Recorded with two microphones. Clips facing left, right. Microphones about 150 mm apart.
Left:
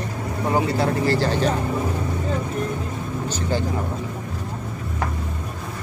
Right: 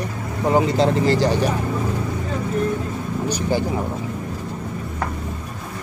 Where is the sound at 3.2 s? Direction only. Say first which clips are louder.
Right 4 dB; 15° right (ahead or behind).